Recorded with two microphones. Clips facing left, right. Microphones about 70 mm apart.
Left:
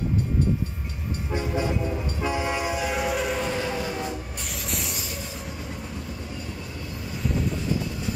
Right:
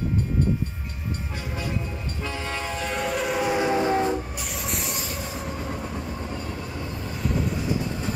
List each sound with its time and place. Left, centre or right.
1.3 s train: left; by 3.4 s centre
3.4 s train: right